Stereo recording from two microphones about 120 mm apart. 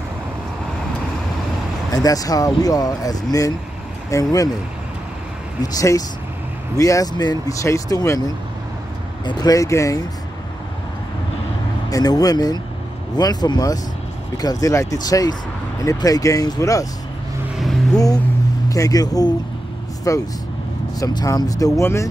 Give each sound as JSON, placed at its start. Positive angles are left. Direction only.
{"t": 1.9, "sound": "speech", "side_deg": 30}
{"t": 5.6, "sound": "speech", "side_deg": 30}
{"t": 9.2, "sound": "speech", "side_deg": 30}
{"t": 11.9, "sound": "speech", "side_deg": 30}
{"t": 17.9, "sound": "speech", "side_deg": 30}